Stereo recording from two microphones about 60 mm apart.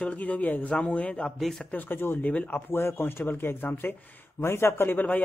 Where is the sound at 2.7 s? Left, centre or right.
Left.